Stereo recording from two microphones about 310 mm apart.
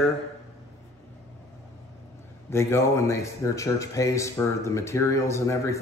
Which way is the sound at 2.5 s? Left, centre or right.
Centre.